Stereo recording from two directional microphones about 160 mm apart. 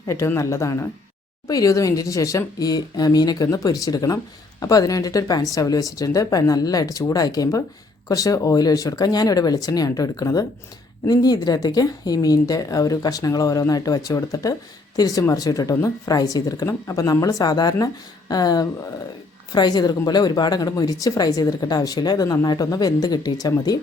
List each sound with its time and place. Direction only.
0.1 s speech: 20° left (ahead or behind)